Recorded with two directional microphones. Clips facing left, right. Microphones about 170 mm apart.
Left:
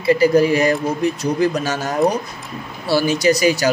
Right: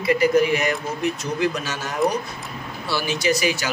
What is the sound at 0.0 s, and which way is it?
Speech, 30° left (ahead or behind).